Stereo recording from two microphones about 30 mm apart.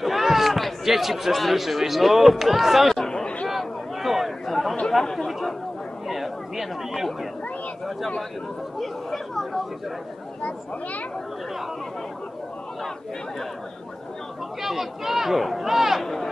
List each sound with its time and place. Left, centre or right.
0.0 s basketball bounce: centre
0.8 s speech: centre
3.4 s a sound: centre
4.5 s chatter: centre
5.0 s speech: centre
6.0 s speech: centre
8.7 s speech: centre
10.4 s speech: left
14.6 s speech: centre
16.0 s speech: centre